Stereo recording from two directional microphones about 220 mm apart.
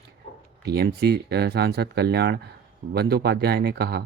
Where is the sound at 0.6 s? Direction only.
45° right (ahead or behind).